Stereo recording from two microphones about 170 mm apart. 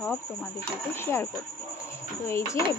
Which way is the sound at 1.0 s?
15° left (ahead or behind).